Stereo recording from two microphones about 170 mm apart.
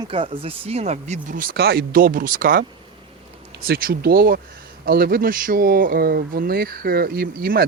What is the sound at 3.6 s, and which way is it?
Speech, 60° right (ahead or behind).